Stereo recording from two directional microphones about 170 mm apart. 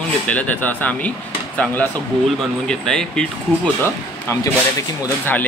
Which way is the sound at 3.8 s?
15° left (ahead or behind).